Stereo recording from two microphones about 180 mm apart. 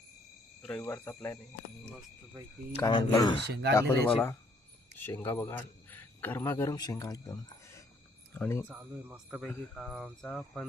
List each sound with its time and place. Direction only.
0.8 s speech: 15° left (ahead or behind)
2.4 s speech: 20° right (ahead or behind)
2.7 s speech: 20° left (ahead or behind)
3.4 s speech: 70° right (ahead or behind)
3.8 s a man's voice: 15° left (ahead or behind)
8.7 s speech: 10° right (ahead or behind)